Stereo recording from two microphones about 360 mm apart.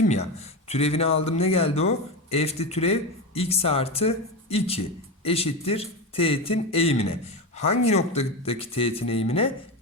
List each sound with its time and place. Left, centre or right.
0.1 s speech: centre